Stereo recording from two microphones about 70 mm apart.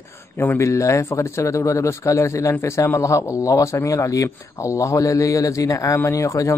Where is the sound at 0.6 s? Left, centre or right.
Left.